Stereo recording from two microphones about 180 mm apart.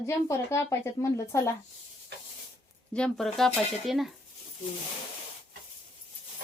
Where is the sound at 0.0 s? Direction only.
15° left (ahead or behind).